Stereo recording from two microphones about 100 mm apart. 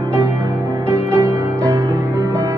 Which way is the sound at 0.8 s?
25° right (ahead or behind).